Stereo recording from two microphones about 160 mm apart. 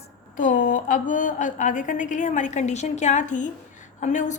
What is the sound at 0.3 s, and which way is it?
A woman's voice, 55° left (ahead or behind).